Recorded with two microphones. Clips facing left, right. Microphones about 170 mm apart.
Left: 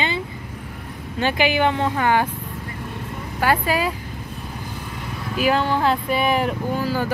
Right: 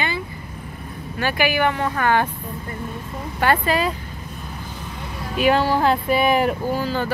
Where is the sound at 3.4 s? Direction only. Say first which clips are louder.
Right 1 dB; 10° left (ahead or behind).